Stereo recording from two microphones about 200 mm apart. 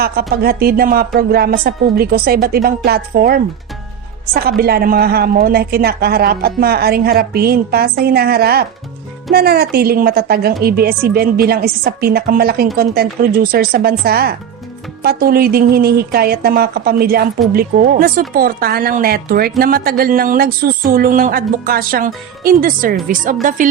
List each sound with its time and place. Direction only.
0.0 s speech: 50° right (ahead or behind)